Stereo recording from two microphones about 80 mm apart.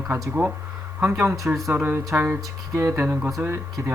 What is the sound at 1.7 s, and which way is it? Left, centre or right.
Speech, right.